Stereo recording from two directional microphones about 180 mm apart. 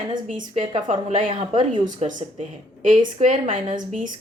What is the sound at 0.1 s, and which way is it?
A woman's voice, 45° right (ahead or behind).